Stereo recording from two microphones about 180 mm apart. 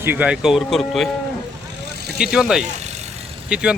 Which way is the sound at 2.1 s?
5° right (ahead or behind).